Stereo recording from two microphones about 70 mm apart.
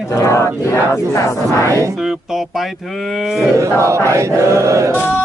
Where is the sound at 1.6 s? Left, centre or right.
Right.